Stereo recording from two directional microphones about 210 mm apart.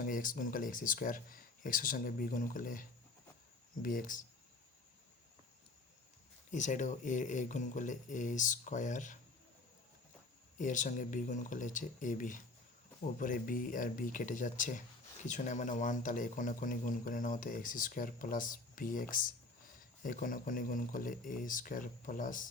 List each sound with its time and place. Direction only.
0.0 s speech: 40° left (ahead or behind)
3.8 s speech: 40° left (ahead or behind)
6.5 s speech: 35° left (ahead or behind)
10.6 s speech: 35° left (ahead or behind)